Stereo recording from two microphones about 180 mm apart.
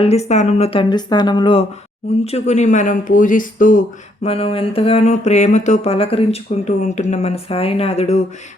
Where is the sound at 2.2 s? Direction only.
35° left (ahead or behind).